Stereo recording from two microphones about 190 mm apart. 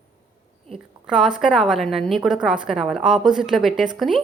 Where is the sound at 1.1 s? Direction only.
5° right (ahead or behind).